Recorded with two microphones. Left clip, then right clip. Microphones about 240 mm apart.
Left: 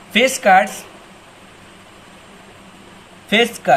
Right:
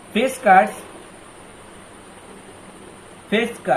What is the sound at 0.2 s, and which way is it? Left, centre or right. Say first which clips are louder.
Speech: left 2 dB; left.